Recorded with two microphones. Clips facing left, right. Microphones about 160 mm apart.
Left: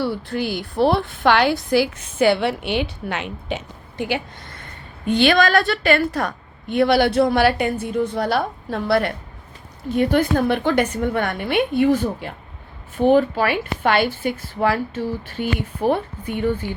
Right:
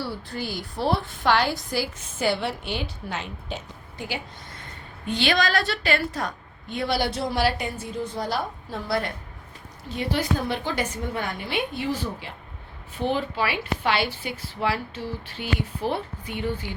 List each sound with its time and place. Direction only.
0.0 s a woman's voice: 65° left (ahead or behind)
9.9 s a woman's voice: 55° left (ahead or behind)